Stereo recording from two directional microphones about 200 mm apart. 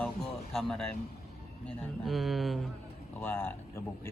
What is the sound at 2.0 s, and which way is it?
Speech, centre (ahead or behind).